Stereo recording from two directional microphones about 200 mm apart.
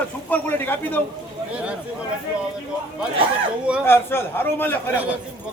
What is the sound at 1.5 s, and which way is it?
Speech, 5° right (ahead or behind).